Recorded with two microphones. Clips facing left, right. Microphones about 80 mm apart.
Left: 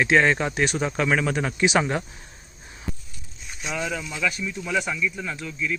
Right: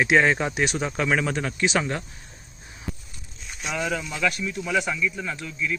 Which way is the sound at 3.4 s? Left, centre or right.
Centre.